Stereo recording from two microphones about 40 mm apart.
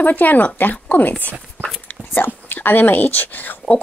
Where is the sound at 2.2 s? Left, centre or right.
Left.